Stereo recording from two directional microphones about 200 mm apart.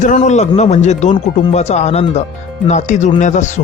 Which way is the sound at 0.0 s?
35° left (ahead or behind).